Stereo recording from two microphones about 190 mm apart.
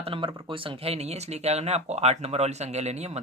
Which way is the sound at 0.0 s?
30° right (ahead or behind).